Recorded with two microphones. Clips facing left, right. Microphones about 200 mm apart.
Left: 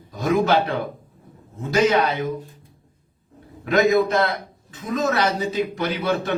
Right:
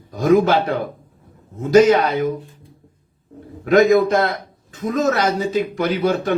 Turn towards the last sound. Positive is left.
turn(degrees=-45)  # may be behind; listen again after turning